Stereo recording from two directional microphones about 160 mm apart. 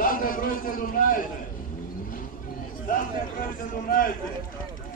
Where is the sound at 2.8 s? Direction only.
60° left (ahead or behind).